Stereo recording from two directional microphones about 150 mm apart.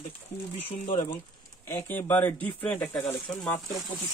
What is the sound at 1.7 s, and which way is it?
Speech, 15° left (ahead or behind).